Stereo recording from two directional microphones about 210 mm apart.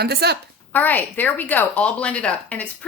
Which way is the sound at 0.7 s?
10° left (ahead or behind).